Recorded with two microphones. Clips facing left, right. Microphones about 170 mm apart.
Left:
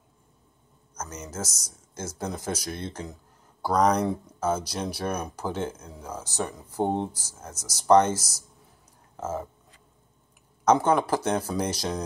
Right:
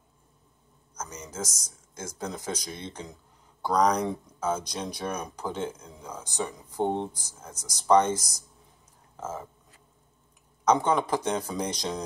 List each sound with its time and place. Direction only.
0.9 s a sound: 5° left (ahead or behind)
1.4 s speech: 10° right (ahead or behind)
2.0 s speech: 5° left (ahead or behind)
7.1 s speech: 15° right (ahead or behind)
7.7 s speech: 10° left (ahead or behind)
8.1 s speech: 15° right (ahead or behind)
9.1 s speech: 10° left (ahead or behind)
10.6 s speech: 5° left (ahead or behind)